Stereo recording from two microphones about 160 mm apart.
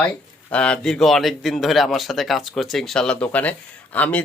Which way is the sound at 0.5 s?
5° left (ahead or behind).